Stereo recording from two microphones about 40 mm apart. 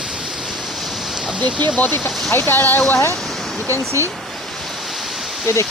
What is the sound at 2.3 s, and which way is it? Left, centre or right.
Speech, left.